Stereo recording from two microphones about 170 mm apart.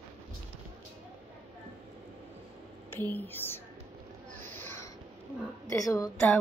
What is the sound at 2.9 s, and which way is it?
Speech, 10° left (ahead or behind).